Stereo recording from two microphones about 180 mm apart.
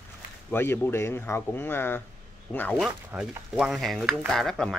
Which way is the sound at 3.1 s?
5° right (ahead or behind).